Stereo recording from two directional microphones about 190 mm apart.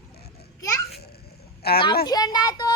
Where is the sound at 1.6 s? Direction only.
55° left (ahead or behind).